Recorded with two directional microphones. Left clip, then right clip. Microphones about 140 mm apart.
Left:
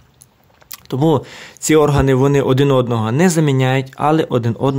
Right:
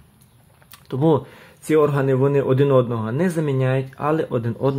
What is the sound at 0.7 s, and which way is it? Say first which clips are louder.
Speech: left 3 dB; 30° left (ahead or behind).